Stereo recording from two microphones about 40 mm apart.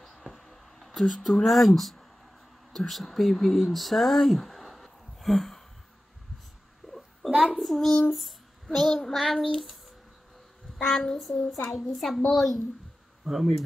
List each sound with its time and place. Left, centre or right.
0.0 s a sound: centre
2.7 s speech: centre
7.2 s child singing: centre
8.6 s a child's voice: centre
9.0 s child singing: centre
10.8 s a child's voice: left
11.3 s speech: centre
11.9 s child singing: centre
13.2 s speech: centre